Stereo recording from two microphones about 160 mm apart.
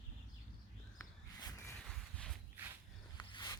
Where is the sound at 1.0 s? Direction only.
20° left (ahead or behind).